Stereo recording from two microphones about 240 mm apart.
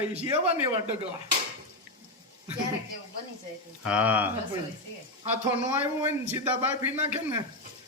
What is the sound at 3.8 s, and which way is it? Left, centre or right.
Speech, centre.